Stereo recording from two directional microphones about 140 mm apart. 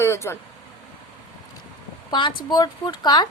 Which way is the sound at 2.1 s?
35° left (ahead or behind).